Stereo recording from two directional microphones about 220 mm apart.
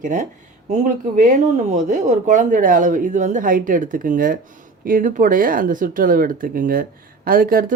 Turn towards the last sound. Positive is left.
turn(degrees=-40)  # may be behind; listen again after turning